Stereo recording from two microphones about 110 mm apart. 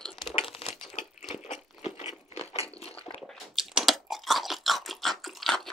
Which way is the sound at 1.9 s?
70° left (ahead or behind).